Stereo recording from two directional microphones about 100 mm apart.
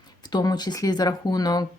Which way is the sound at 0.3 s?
45° left (ahead or behind).